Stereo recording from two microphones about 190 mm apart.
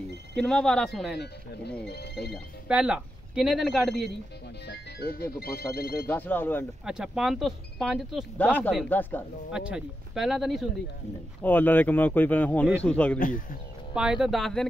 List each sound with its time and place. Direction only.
0.4 s speech: 5° left (ahead or behind)
1.1 s speech: 60° left (ahead or behind)
2.3 s speech: 5° right (ahead or behind)
4.6 s speech: 55° left (ahead or behind)
6.0 s speech: 10° left (ahead or behind)
6.8 s speech: 5° right (ahead or behind)
9.5 s speech: 5° right (ahead or behind)
11.4 s speech: 10° left (ahead or behind)
13.2 s speech: 45° left (ahead or behind)
13.9 s speech: 5° right (ahead or behind)